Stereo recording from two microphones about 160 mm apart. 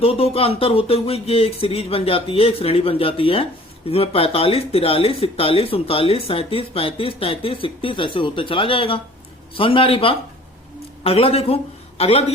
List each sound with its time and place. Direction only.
0.0 s speech: 35° left (ahead or behind)